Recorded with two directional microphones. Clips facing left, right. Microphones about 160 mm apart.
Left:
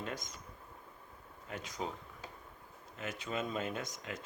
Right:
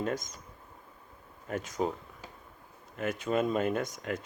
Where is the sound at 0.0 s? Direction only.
45° right (ahead or behind).